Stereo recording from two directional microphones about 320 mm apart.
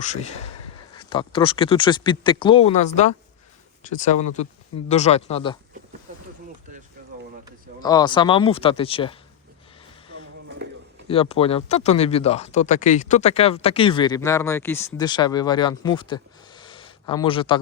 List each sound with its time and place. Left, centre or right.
0.0 s speech: left
7.8 s speech: centre
10.1 s a sound: right
11.1 s speech: centre